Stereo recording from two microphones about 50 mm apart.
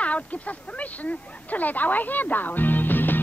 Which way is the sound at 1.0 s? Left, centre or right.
Left.